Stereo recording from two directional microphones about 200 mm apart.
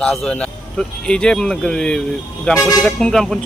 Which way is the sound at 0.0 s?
5° left (ahead or behind).